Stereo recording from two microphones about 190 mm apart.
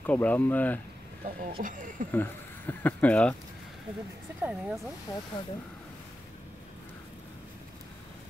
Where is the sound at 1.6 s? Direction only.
45° right (ahead or behind).